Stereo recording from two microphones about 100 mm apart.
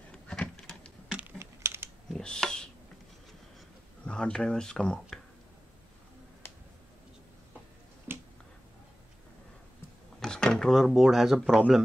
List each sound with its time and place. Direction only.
0.1 s a sound: 10° left (ahead or behind)
1.0 s typing: 10° right (ahead or behind)
1.4 s typing: 25° right (ahead or behind)
2.0 s computer keyboard: 5° left (ahead or behind)
4.0 s speech: 10° left (ahead or behind)
8.1 s finger snapping: 25° right (ahead or behind)
10.2 s drawer open or close: 5° left (ahead or behind)
10.9 s speech: 5° right (ahead or behind)